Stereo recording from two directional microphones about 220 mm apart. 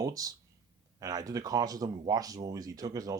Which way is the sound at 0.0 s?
15° right (ahead or behind).